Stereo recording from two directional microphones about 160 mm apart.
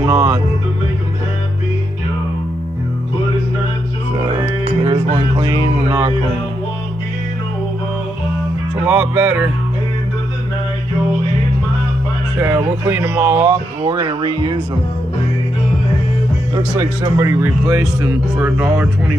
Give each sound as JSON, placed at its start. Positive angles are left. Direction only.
{"t": 0.0, "sound": "speech", "side_deg": -20}
{"t": 4.2, "sound": "music", "side_deg": -30}
{"t": 5.1, "sound": "speech", "side_deg": -30}
{"t": 8.8, "sound": "speech", "side_deg": -10}
{"t": 12.4, "sound": "speech", "side_deg": -15}
{"t": 13.8, "sound": "speech", "side_deg": -25}
{"t": 16.5, "sound": "speech", "side_deg": -25}